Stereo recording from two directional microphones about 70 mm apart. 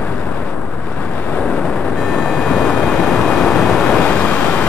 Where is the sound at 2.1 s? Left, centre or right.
Centre.